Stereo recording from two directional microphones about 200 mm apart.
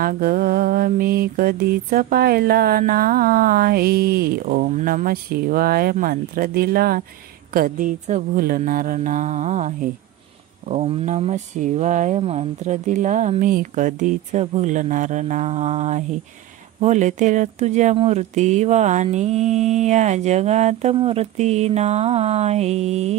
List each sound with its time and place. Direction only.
0.0 s mantra: 45° right (ahead or behind)
7.5 s speech: 45° right (ahead or behind)